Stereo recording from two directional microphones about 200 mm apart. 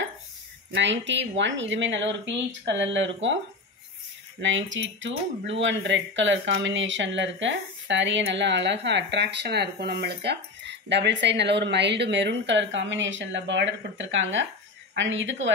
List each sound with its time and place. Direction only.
0.7 s speech: 65° right (ahead or behind)
4.4 s speech: 65° right (ahead or behind)